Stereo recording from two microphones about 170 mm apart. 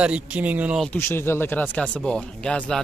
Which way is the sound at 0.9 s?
15° left (ahead or behind).